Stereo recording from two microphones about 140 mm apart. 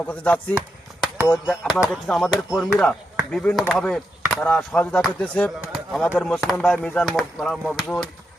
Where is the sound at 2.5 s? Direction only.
5° right (ahead or behind).